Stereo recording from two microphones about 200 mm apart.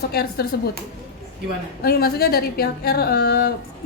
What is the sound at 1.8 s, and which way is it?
A woman's voice, 50° left (ahead or behind).